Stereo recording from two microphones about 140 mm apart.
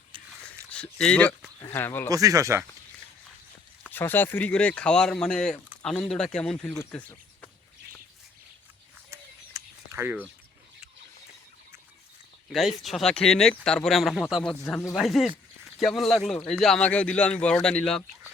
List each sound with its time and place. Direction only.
0.7 s speech: 5° left (ahead or behind)
2.0 s speech: 25° right (ahead or behind)
3.9 s speech: 15° left (ahead or behind)
9.0 s a sound: 20° right (ahead or behind)
12.5 s speech: centre (ahead or behind)